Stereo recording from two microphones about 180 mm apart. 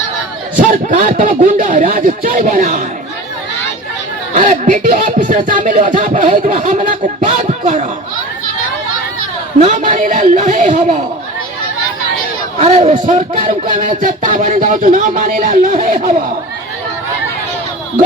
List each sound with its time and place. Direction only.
0.6 s speech: 50° right (ahead or behind)
4.4 s speech: 45° right (ahead or behind)
9.6 s speech: 45° right (ahead or behind)
12.5 s speech: 40° right (ahead or behind)